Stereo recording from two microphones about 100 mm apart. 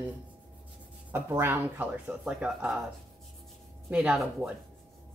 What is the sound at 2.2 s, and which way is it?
Speech, 5° right (ahead or behind).